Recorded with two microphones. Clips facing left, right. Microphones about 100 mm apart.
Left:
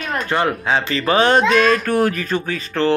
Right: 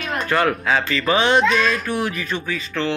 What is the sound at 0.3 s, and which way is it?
Speech, 25° left (ahead or behind).